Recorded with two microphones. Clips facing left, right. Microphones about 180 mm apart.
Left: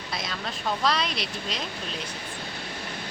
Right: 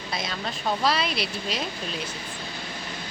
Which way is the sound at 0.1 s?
Centre (ahead or behind).